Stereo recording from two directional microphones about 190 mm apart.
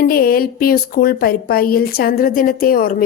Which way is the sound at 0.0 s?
50° left (ahead or behind).